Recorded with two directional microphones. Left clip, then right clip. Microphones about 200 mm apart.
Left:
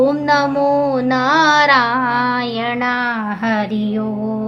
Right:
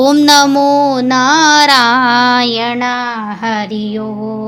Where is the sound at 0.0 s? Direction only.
60° right (ahead or behind).